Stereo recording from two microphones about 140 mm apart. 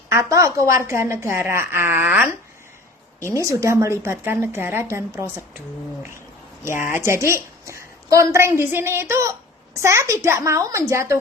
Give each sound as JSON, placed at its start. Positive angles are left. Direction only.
{"t": 0.1, "sound": "a woman's voice", "side_deg": -20}
{"t": 6.7, "sound": "a woman's voice", "side_deg": -15}